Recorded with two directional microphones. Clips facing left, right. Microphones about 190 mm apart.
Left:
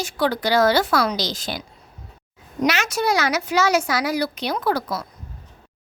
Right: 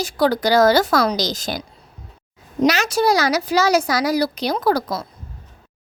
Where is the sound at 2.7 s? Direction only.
35° right (ahead or behind).